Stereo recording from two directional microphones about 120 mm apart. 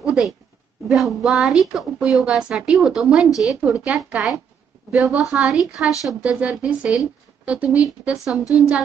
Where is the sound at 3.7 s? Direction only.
10° right (ahead or behind).